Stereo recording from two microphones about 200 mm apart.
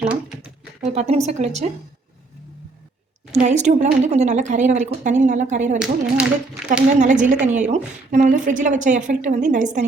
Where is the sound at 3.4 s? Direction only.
35° right (ahead or behind).